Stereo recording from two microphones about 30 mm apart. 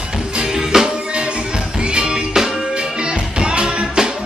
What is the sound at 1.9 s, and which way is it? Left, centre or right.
Music, right.